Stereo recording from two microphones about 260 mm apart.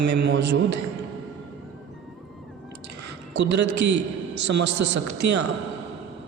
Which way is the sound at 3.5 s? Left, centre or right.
Right.